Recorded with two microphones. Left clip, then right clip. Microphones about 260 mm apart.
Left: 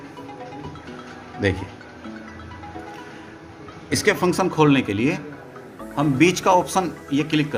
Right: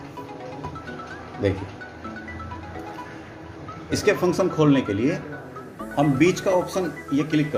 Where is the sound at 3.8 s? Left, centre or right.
Left.